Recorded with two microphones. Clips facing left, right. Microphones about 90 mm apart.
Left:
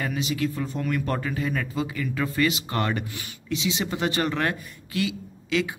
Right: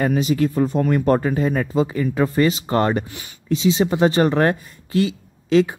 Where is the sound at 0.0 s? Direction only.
40° right (ahead or behind).